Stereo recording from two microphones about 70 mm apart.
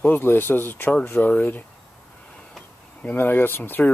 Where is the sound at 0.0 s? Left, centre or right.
Left.